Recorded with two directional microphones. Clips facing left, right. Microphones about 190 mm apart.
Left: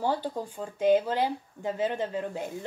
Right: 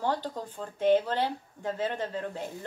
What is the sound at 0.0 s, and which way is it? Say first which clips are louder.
Speech: left 2 dB; 10° left (ahead or behind).